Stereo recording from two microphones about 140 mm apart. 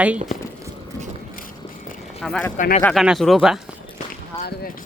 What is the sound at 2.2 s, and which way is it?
Speech, 5° left (ahead or behind).